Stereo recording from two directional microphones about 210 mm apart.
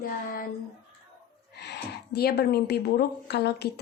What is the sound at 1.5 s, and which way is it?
A woman's voice, 50° left (ahead or behind).